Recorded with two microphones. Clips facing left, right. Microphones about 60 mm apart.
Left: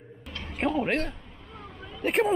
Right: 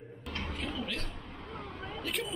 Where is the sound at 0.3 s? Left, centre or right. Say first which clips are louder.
Right 1 dB; right.